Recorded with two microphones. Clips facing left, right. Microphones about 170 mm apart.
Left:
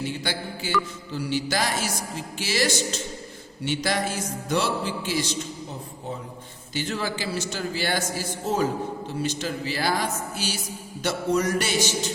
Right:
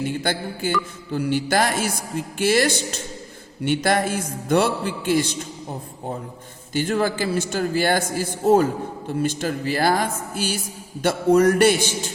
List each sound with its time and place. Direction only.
0.0 s a man's voice: 50° right (ahead or behind)
6.7 s a man's voice: 50° right (ahead or behind)